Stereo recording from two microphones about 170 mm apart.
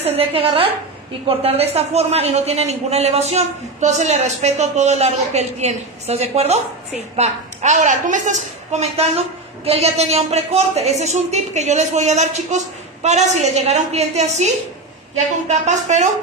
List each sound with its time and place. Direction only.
0.0 s a man's voice: 35° right (ahead or behind)